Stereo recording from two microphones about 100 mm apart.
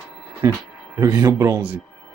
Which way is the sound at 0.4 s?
30° right (ahead or behind).